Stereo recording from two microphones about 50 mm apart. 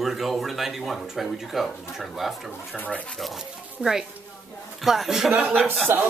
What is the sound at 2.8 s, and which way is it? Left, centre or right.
Speech, left.